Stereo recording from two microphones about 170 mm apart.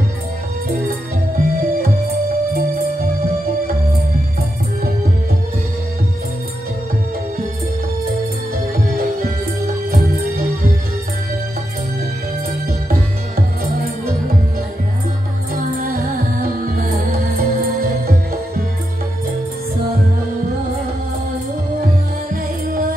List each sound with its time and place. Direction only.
0.8 s music: 60° right (ahead or behind)
9.8 s music: 60° right (ahead or behind)
15.5 s music: 60° right (ahead or behind)